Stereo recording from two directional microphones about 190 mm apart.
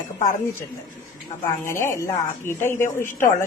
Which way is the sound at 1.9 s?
15° left (ahead or behind).